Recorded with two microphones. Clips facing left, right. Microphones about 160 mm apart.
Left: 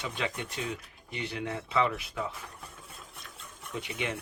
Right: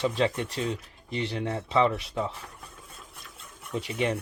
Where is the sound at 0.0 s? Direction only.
35° right (ahead or behind).